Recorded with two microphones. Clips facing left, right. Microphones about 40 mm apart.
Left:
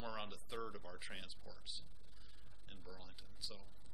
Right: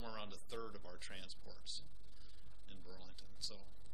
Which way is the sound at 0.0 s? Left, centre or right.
Centre.